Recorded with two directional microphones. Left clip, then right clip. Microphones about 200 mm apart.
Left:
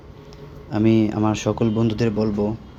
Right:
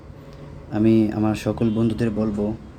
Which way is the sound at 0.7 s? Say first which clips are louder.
Even; 5° left (ahead or behind).